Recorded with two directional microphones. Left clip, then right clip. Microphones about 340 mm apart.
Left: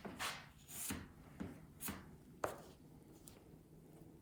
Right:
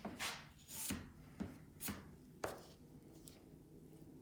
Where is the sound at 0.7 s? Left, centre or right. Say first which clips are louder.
Right 1 dB; centre.